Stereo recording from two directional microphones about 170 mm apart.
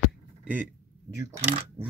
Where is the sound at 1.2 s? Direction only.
15° right (ahead or behind).